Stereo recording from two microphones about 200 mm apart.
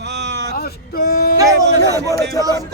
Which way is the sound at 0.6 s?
50° left (ahead or behind).